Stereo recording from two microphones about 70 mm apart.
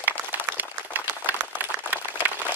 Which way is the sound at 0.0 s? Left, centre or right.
Right.